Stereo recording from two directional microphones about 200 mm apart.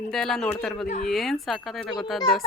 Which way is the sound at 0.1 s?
Centre (ahead or behind).